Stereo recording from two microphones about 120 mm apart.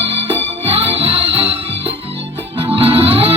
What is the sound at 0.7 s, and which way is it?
Music, 55° right (ahead or behind).